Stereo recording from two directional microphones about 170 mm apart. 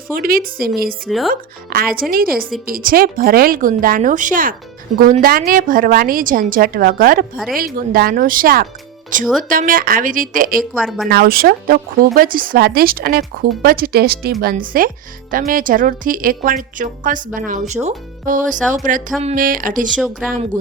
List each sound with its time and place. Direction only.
0.1 s speech: 60° right (ahead or behind)
1.0 s speech: centre (ahead or behind)
1.3 s speech: 60° right (ahead or behind)
10.6 s speech: centre (ahead or behind)
11.1 s speech: 60° right (ahead or behind)
14.5 s speech: 55° right (ahead or behind)
19.9 s speech: centre (ahead or behind)